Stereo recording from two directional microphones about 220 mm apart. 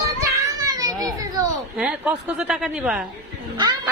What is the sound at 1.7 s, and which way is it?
A woman's voice, 5° right (ahead or behind).